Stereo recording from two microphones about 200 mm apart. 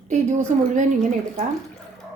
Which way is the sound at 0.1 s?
35° right (ahead or behind).